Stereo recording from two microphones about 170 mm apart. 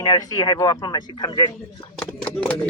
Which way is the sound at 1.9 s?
5° left (ahead or behind).